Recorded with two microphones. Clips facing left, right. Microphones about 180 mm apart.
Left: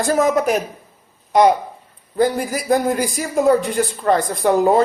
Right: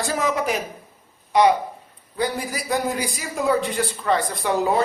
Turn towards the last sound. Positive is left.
turn(degrees=45)  # may be behind; listen again after turning